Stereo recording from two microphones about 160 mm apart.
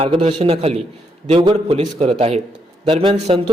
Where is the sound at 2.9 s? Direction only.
25° right (ahead or behind).